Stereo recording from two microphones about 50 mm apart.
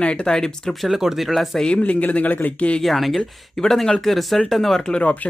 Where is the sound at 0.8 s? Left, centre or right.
Centre.